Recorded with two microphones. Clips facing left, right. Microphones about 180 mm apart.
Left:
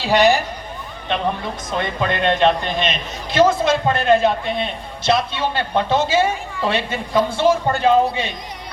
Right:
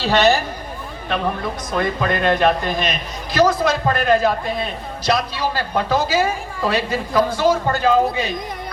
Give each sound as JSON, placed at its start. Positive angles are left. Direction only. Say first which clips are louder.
{"t": 0.0, "sound": "speech", "louder": "left 1 dB", "side_deg": 15}
{"t": 1.8, "sound": "a man's voice", "louder": "right 1 dB", "side_deg": 25}